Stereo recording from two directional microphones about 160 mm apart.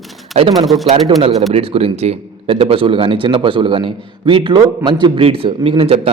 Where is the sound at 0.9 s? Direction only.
40° right (ahead or behind).